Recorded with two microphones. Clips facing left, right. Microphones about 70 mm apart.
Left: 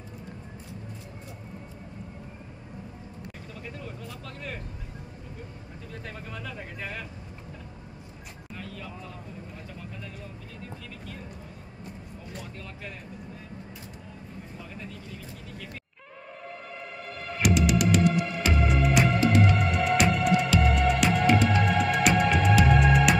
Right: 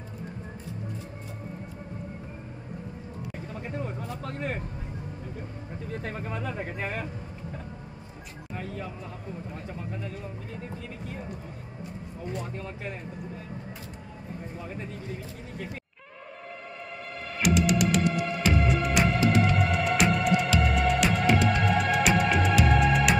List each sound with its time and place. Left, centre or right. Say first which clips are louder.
3.5 s a sound: right 7 dB; right
6.0 s speech: right 5 dB; right
8.5 s a sound: right 5 dB; right
12.3 s speech: right 7 dB; right
14.7 s speech: right 4 dB; right
17.4 s music: even; centre